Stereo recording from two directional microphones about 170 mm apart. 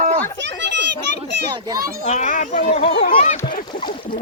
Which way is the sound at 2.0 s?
45° left (ahead or behind).